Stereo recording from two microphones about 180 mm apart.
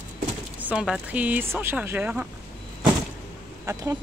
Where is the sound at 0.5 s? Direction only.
5° right (ahead or behind).